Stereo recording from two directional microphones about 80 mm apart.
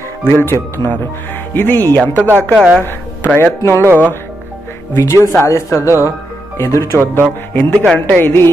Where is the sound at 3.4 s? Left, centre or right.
Left.